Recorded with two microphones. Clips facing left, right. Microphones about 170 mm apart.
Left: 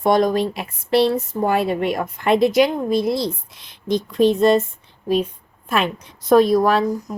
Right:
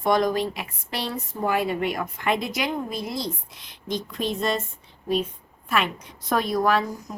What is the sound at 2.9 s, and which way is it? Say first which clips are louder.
Speech: left 11 dB; 85° left.